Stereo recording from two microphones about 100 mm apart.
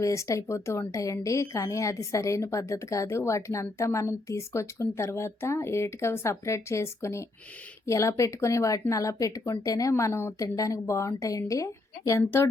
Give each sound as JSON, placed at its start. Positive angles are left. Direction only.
{"t": 0.0, "sound": "a woman's voice", "side_deg": 30}